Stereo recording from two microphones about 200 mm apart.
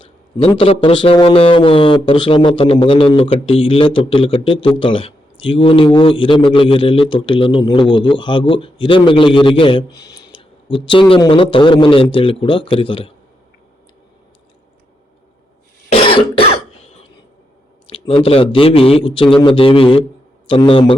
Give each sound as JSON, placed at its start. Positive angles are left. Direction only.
{"t": 0.0, "sound": "a man's voice", "side_deg": 25}
{"t": 10.0, "sound": "a sound", "side_deg": 20}
{"t": 11.1, "sound": "a man's voice", "side_deg": 25}
{"t": 15.9, "sound": "cough", "side_deg": 25}
{"t": 17.9, "sound": "a man's voice", "side_deg": 25}